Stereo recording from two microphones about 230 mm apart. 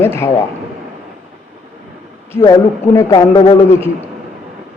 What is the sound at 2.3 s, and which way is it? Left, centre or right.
A man's voice, centre.